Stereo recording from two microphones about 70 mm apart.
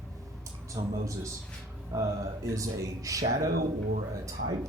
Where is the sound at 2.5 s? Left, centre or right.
Right.